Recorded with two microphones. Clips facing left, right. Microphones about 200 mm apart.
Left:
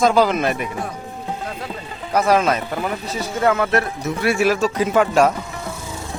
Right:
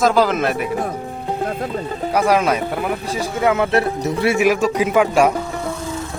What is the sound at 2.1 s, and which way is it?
Speech, 10° right (ahead or behind).